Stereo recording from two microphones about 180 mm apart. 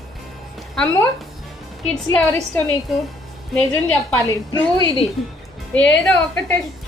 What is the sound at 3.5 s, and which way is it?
A woman's voice, 5° left (ahead or behind).